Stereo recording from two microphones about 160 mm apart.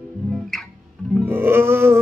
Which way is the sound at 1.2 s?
15° right (ahead or behind).